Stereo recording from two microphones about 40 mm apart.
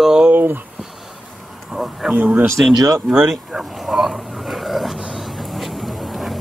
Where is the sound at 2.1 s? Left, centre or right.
Right.